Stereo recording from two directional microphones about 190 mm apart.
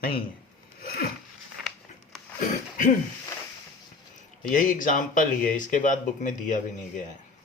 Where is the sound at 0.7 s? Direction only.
50° left (ahead or behind).